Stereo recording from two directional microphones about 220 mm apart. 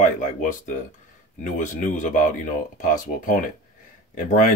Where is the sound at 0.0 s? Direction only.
35° left (ahead or behind).